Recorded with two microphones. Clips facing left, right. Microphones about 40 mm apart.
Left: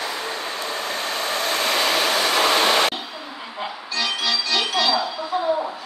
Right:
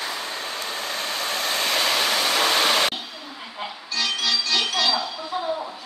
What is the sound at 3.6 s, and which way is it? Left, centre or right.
Music, centre.